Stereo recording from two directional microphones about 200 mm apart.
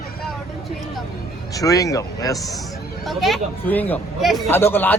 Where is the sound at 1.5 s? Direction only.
15° left (ahead or behind).